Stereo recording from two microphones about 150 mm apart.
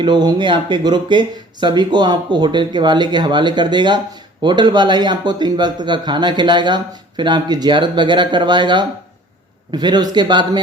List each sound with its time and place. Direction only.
0.0 s a man's voice: 30° right (ahead or behind)